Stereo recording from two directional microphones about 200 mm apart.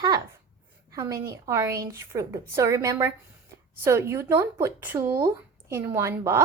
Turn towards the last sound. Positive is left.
turn(degrees=-15)  # may be behind; listen again after turning